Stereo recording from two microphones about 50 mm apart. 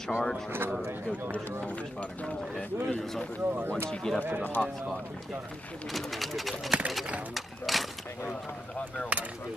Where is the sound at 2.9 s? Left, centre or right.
Centre.